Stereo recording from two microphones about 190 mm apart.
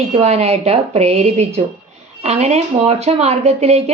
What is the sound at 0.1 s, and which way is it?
A woman's voice, 35° right (ahead or behind).